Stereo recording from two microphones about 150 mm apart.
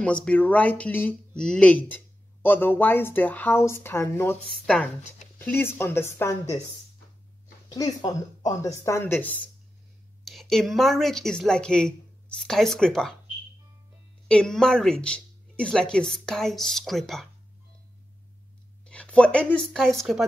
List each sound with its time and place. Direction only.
0.0 s speech: 10° left (ahead or behind)
5.4 s speech: 15° left (ahead or behind)
7.7 s speech: 25° left (ahead or behind)
10.2 s speech: centre (ahead or behind)
14.2 s speech: 5° left (ahead or behind)
18.9 s speech: 5° left (ahead or behind)